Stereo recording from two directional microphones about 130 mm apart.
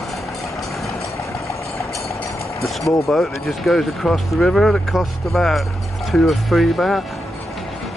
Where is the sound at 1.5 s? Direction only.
25° left (ahead or behind).